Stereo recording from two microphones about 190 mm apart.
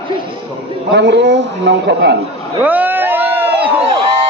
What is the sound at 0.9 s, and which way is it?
A man's voice, 65° right (ahead or behind).